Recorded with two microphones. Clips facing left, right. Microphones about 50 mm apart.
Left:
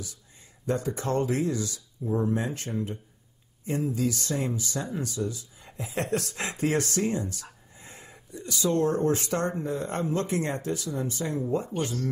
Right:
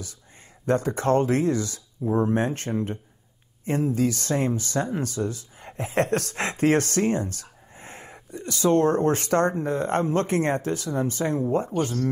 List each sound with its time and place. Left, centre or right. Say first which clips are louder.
0.7 s speech: right 6 dB; right